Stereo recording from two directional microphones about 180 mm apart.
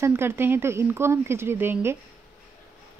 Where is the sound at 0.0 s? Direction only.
15° right (ahead or behind).